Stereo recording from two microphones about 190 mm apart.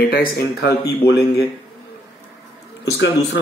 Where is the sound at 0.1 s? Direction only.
55° left (ahead or behind).